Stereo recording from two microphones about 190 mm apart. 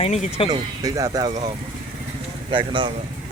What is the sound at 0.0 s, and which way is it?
Speech, 35° left (ahead or behind).